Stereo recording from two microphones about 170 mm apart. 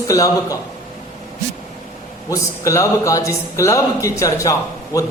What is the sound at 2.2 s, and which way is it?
A man's voice, 20° left (ahead or behind).